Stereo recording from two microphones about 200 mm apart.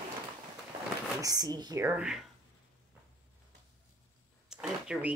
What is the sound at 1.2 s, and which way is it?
Speech, 20° right (ahead or behind).